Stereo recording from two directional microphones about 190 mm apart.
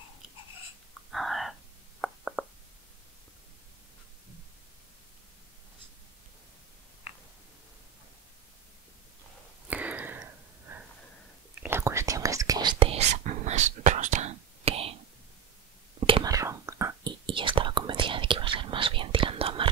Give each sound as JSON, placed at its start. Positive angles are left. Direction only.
{"t": 1.1, "sound": "whispering", "side_deg": 0}
{"t": 2.0, "sound": "a sound", "side_deg": 0}
{"t": 9.7, "sound": "a sound", "side_deg": -10}
{"t": 11.6, "sound": "whispering", "side_deg": -15}
{"t": 16.1, "sound": "whispering", "side_deg": -25}
{"t": 17.3, "sound": "whispering", "side_deg": -25}